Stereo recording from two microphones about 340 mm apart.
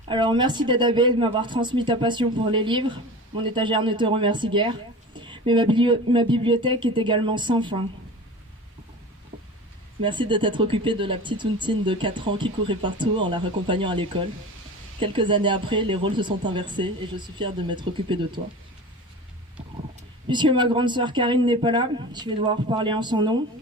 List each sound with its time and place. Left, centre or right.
0.1 s speech: centre
10.0 s speech: centre
20.2 s speech: centre